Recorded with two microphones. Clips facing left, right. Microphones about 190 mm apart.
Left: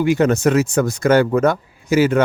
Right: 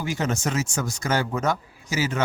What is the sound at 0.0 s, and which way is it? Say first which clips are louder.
Speech: left 11 dB; 60° left (ahead or behind).